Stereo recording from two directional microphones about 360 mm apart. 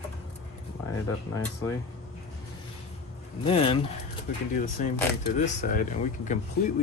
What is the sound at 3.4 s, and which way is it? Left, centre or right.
Speech, centre.